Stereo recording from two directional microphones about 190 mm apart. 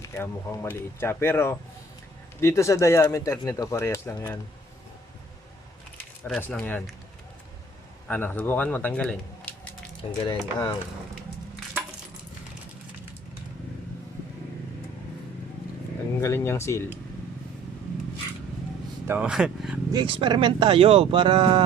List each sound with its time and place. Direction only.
0.0 s speech: 15° left (ahead or behind)
6.2 s speech: 5° left (ahead or behind)
8.0 s speech: 10° left (ahead or behind)
10.0 s speech: 20° left (ahead or behind)
16.2 s speech: 15° left (ahead or behind)
19.0 s speech: 10° right (ahead or behind)
19.9 s speech: 25° right (ahead or behind)